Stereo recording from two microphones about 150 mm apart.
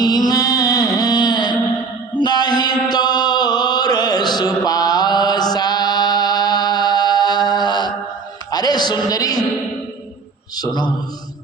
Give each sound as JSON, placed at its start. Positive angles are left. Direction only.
{"t": 0.0, "sound": "music", "side_deg": 25}
{"t": 2.1, "sound": "chant", "side_deg": 30}
{"t": 8.4, "sound": "a sound", "side_deg": 25}
{"t": 10.6, "sound": "a man's voice", "side_deg": 30}